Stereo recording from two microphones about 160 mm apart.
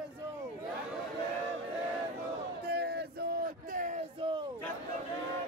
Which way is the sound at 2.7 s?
90° right.